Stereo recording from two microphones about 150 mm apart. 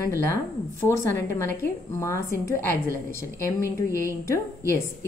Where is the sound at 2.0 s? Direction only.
20° left (ahead or behind).